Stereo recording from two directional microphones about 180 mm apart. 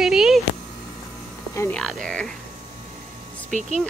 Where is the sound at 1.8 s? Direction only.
Centre (ahead or behind).